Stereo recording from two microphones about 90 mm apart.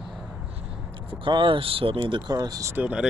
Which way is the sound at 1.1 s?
65° right (ahead or behind).